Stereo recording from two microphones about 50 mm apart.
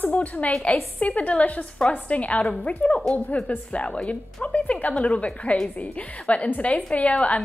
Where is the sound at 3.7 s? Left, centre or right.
Left.